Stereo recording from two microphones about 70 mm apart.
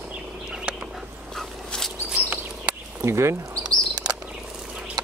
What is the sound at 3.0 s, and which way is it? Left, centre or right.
Speech, right.